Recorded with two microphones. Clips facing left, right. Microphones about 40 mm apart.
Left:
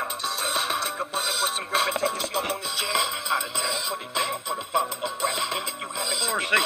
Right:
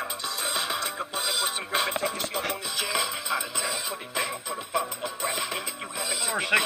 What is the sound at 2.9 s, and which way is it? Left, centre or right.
Music, left.